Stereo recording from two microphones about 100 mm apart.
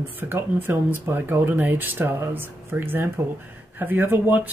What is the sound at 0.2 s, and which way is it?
Speech, 20° right (ahead or behind).